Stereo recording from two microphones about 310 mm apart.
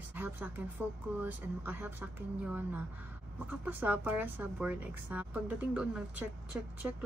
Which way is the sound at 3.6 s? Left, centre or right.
Centre.